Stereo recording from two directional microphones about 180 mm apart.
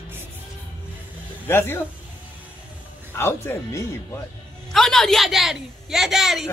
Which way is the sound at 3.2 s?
15° left (ahead or behind).